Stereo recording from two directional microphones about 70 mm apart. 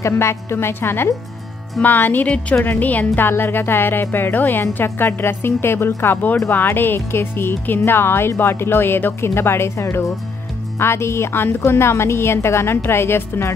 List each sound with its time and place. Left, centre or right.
0.0 s speech: left